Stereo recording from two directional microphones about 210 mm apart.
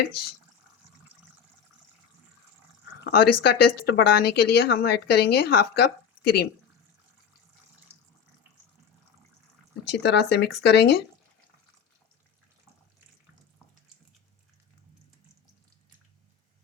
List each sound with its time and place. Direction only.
3.0 s speech: 50° left (ahead or behind)
9.8 s speech: 55° left (ahead or behind)